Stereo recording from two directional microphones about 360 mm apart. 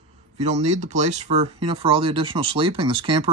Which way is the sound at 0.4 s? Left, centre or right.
Centre.